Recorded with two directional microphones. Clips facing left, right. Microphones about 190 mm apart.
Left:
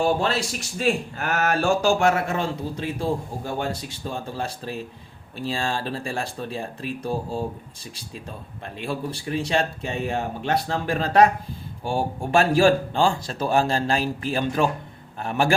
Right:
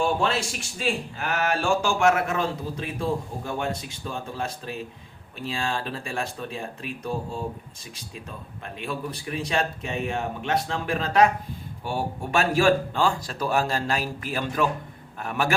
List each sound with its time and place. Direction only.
0.0 s speech: 35° left (ahead or behind)
8.6 s speech: 30° left (ahead or behind)